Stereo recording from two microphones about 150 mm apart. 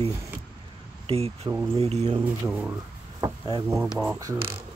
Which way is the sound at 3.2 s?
25° right (ahead or behind).